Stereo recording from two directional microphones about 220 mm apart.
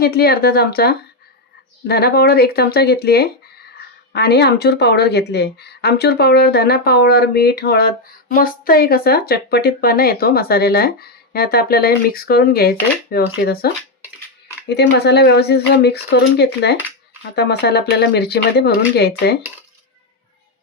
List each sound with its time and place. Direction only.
0.0 s speech: 45° left (ahead or behind)
14.7 s speech: 50° left (ahead or behind)